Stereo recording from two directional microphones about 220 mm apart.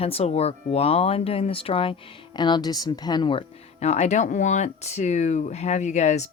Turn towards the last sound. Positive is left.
turn(degrees=30)  # may be behind; listen again after turning